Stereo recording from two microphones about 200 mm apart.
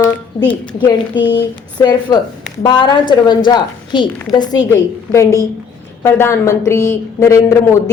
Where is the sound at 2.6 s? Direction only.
25° left (ahead or behind).